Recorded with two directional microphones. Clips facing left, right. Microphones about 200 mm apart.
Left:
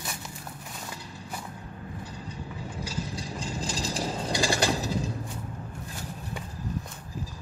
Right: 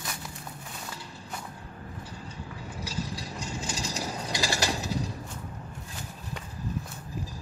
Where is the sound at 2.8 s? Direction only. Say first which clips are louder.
Even; 30° left (ahead or behind).